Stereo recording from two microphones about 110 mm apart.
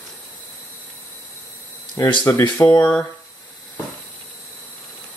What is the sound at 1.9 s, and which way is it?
Speech, 40° left (ahead or behind).